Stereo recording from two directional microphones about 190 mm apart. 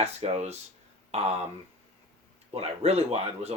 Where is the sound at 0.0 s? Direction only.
35° right (ahead or behind).